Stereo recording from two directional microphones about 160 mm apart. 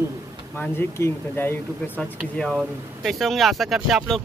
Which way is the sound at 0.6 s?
15° left (ahead or behind).